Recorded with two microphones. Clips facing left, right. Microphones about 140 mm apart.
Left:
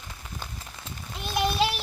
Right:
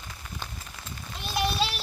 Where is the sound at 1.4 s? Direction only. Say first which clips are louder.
Left 3 dB; 15° left (ahead or behind).